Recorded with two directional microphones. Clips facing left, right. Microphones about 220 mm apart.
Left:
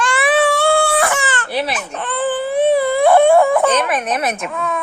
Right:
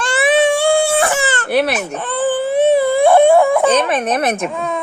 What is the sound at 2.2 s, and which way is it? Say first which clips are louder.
Dog: right 2 dB; 20° right (ahead or behind).